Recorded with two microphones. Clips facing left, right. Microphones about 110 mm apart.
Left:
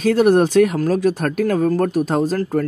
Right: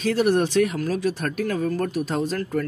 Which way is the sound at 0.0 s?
45° left (ahead or behind).